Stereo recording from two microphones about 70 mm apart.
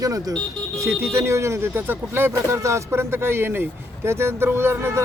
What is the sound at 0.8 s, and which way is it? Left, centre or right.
Speech, right.